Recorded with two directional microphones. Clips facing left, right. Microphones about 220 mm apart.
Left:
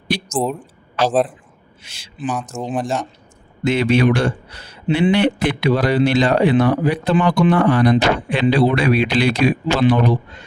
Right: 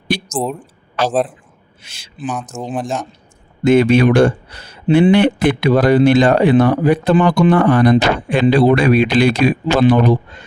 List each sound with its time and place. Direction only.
0.3 s speech: centre (ahead or behind)
1.0 s a man's voice: 50° right (ahead or behind)
2.2 s speech: 5° left (ahead or behind)
3.6 s a man's voice: 50° right (ahead or behind)